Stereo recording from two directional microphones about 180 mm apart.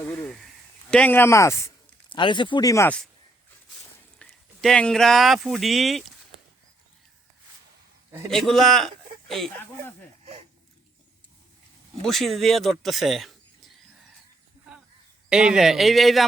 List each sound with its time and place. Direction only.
0.0 s speech: 10° left (ahead or behind)
4.2 s speech: centre (ahead or behind)
8.3 s a man's voice: centre (ahead or behind)
12.0 s speech: centre (ahead or behind)
15.3 s speech: 5° right (ahead or behind)